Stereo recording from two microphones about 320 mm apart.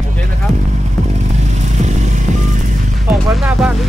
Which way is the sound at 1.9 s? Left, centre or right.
Right.